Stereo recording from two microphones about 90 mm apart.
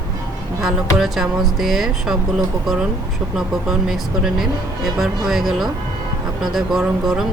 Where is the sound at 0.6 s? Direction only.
5° right (ahead or behind).